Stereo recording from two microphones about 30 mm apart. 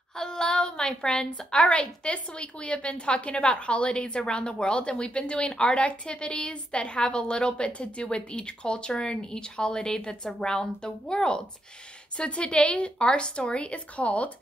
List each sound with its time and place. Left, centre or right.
0.1 s a sound: left
1.5 s a woman's voice: left
5.5 s a woman's voice: left
13.0 s a woman's voice: left